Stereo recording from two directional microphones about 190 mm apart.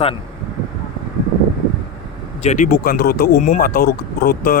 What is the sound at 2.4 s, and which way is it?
Speech, 40° left (ahead or behind).